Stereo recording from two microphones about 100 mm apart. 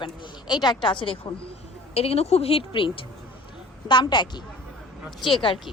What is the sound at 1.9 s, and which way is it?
A woman's voice, 85° left.